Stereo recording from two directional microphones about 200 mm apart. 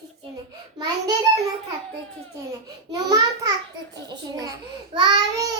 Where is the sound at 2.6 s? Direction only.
20° right (ahead or behind).